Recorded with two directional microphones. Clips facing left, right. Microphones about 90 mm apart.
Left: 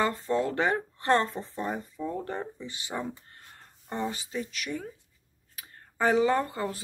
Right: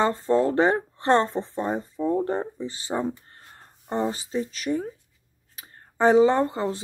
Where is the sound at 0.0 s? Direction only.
30° right (ahead or behind).